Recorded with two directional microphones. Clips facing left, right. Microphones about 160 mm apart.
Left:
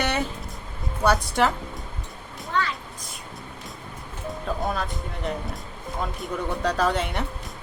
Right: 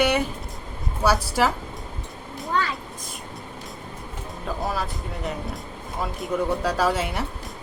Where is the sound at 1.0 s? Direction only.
5° right (ahead or behind).